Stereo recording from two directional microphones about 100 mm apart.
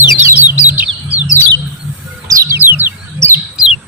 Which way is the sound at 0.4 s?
15° right (ahead or behind).